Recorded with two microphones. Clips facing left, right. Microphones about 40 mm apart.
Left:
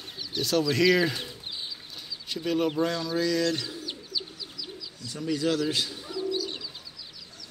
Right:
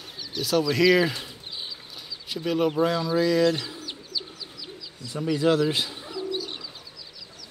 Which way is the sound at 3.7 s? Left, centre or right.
Centre.